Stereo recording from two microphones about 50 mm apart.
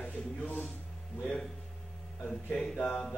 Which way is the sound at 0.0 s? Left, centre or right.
Left.